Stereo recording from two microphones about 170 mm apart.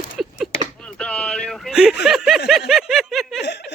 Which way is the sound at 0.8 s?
5° left (ahead or behind).